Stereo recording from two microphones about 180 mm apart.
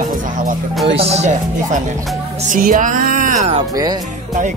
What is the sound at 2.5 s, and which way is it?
Speech, 50° right (ahead or behind).